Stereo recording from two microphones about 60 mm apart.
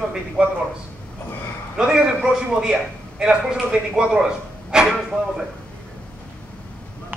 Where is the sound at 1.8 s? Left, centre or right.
Centre.